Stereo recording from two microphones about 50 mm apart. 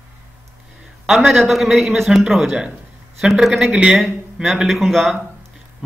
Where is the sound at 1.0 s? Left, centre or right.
Centre.